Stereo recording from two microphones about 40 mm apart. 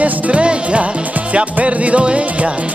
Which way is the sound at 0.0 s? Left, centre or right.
Right.